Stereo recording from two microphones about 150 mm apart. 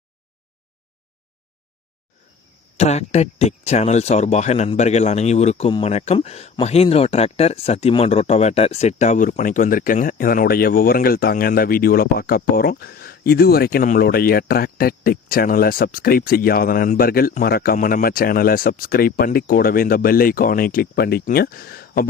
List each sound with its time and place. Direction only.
2.7 s speech: 45° left (ahead or behind); by 22.0 s 90° left